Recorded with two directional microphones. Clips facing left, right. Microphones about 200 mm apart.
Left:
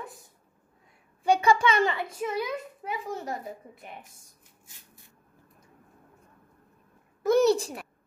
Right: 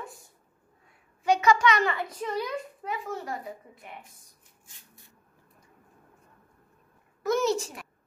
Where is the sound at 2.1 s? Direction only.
5° left (ahead or behind).